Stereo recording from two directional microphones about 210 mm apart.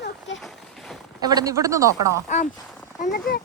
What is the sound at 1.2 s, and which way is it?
Speech, 20° right (ahead or behind).